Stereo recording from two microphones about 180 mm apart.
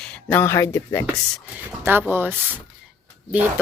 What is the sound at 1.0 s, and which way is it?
Speech, 10° right (ahead or behind).